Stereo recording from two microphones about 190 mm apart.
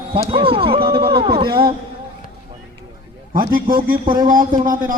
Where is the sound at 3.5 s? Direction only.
50° right (ahead or behind).